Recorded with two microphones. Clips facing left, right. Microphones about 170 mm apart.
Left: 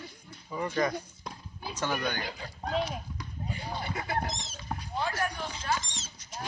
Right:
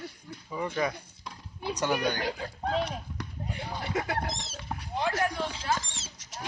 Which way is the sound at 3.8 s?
75° right (ahead or behind).